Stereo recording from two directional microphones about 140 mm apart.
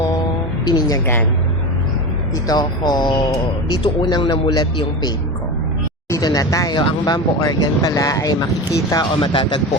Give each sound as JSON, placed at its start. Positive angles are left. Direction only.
{"t": 0.6, "sound": "speech", "side_deg": 25}
{"t": 2.5, "sound": "speech", "side_deg": 30}